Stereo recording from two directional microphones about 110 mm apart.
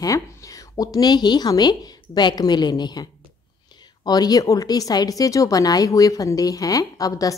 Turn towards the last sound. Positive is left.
turn(degrees=35)  # may be behind; listen again after turning